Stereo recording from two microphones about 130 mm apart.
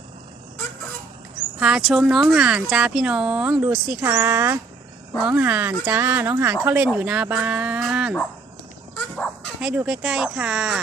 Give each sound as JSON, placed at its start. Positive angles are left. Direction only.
{"t": 1.5, "sound": "speech", "side_deg": -5}
{"t": 9.1, "sound": "bow-wow", "side_deg": 5}
{"t": 9.6, "sound": "speech", "side_deg": -5}